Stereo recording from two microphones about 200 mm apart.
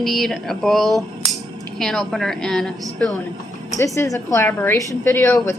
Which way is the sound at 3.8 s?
15° left (ahead or behind).